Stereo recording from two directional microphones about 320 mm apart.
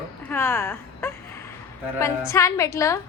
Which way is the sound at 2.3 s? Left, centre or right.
Centre.